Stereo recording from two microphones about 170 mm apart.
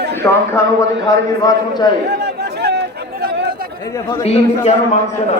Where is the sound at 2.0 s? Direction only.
75° right (ahead or behind).